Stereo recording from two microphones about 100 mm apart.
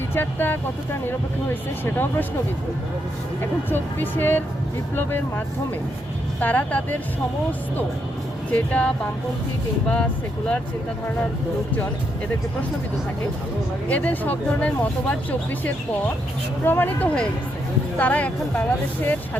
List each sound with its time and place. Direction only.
0.1 s speech: 20° left (ahead or behind)
1.8 s speech: 20° left (ahead or behind)
3.7 s speech: 20° left (ahead or behind)
6.4 s speech: 15° left (ahead or behind)
8.4 s speech: 15° left (ahead or behind)
13.8 s speech: 15° left (ahead or behind)
16.6 s speech: 20° left (ahead or behind)